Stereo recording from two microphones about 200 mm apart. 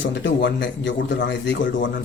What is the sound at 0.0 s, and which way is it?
A man's voice, 65° left (ahead or behind).